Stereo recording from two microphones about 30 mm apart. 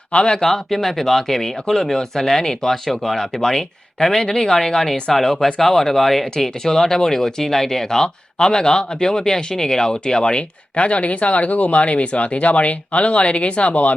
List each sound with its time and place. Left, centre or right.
0.1 s speech: left
0.4 s speech: centre
7.9 s speech: left
10.8 s speech: left